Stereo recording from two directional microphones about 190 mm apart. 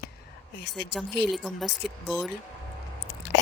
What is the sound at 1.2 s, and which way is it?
Speech, centre (ahead or behind).